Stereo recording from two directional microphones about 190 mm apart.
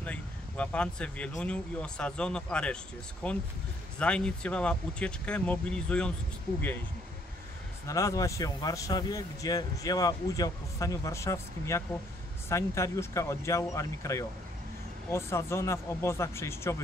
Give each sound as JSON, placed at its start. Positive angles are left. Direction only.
{"t": 0.0, "sound": "speech", "side_deg": 5}
{"t": 7.8, "sound": "speech", "side_deg": 15}